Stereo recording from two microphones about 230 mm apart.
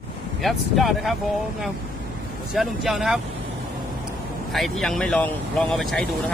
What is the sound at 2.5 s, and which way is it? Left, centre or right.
Speech, centre.